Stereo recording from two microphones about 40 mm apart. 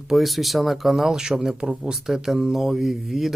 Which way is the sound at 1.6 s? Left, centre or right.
Centre.